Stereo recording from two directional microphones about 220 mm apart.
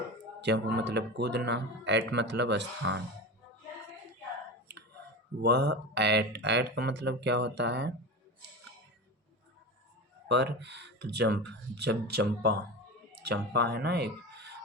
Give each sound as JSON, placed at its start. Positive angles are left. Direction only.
{"t": 0.4, "sound": "speech", "side_deg": -50}
{"t": 5.4, "sound": "speech", "side_deg": -50}
{"t": 10.2, "sound": "speech", "side_deg": -50}